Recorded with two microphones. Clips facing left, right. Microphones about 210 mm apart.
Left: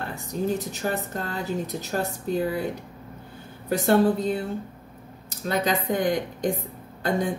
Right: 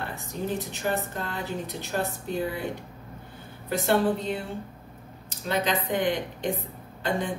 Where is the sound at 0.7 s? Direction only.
45° left (ahead or behind).